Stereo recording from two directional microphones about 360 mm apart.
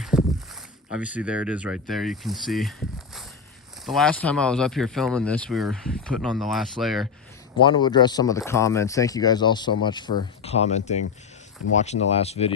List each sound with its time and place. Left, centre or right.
0.0 s a sound: centre
1.0 s speech: centre
3.8 s speech: centre
7.6 s speech: centre